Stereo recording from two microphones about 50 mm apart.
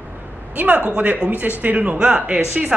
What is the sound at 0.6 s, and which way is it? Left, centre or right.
A man's voice, right.